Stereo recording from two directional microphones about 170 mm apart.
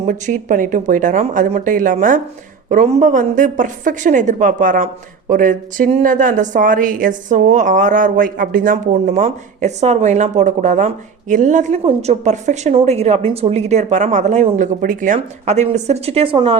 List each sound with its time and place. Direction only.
0.0 s a woman's voice: 45° right (ahead or behind)